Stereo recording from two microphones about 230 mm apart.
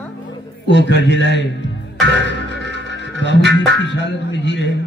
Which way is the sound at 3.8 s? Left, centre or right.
Left.